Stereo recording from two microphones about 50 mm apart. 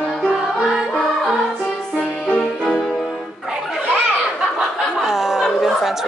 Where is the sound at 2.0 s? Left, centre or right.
Left.